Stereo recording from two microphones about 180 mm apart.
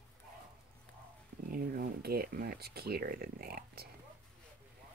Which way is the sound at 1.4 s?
55° right (ahead or behind).